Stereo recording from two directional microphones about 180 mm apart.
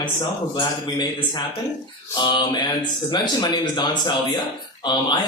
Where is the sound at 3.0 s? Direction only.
25° left (ahead or behind).